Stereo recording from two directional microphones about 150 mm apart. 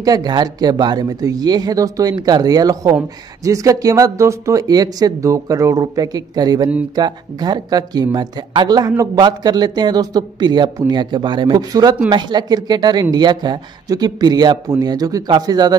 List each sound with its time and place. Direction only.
0.0 s speech: 25° right (ahead or behind)